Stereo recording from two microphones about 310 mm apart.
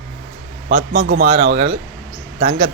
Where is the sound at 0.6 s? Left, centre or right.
Right.